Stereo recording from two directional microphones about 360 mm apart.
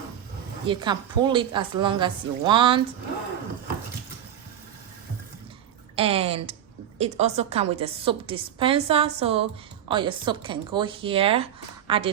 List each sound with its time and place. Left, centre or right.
0.7 s speech: centre
6.0 s a woman's voice: centre